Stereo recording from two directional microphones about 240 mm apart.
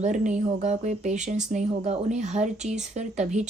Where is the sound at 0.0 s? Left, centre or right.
Right.